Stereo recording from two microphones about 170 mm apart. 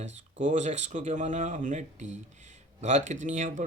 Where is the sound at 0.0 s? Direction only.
45° right (ahead or behind).